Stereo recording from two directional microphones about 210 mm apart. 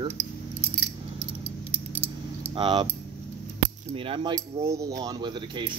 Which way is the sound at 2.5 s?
25° right (ahead or behind).